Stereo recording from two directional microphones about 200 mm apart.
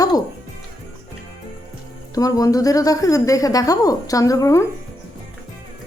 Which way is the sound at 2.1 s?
20° left (ahead or behind).